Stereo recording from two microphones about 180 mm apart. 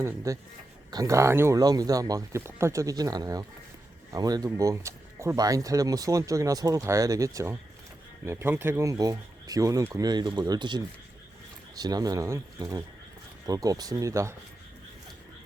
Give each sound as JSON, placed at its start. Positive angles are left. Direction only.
{"t": 0.3, "sound": "a man's voice", "side_deg": -15}